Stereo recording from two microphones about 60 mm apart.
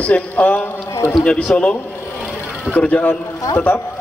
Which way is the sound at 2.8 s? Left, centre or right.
Centre.